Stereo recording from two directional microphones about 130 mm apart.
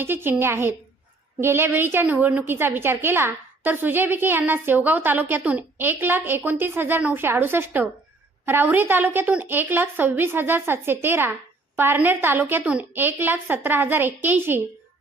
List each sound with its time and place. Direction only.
0.0 s a woman's voice: 15° right (ahead or behind)